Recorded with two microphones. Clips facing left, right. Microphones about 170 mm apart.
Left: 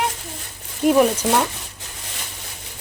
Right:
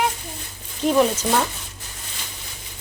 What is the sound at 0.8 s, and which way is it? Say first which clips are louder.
Speech: left 3 dB; 10° left (ahead or behind).